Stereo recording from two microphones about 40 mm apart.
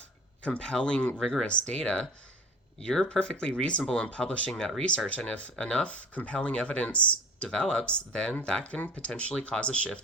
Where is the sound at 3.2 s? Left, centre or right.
Centre.